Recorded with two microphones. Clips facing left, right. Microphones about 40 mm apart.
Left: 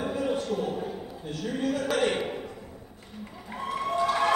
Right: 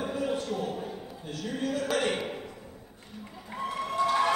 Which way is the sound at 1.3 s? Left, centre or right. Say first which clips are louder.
Left 2 dB; centre.